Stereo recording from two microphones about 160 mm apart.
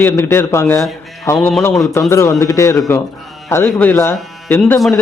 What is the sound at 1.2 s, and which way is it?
Music, 15° left (ahead or behind).